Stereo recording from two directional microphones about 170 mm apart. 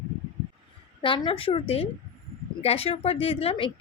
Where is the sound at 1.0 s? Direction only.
30° left (ahead or behind).